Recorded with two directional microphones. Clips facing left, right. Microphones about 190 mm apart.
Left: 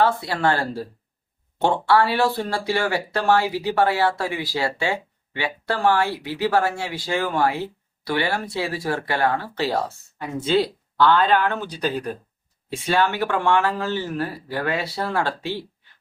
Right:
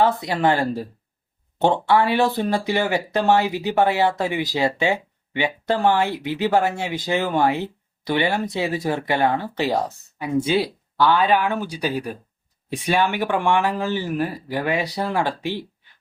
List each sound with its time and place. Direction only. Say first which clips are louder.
0.0 s speech: right 1 dB; 15° right (ahead or behind)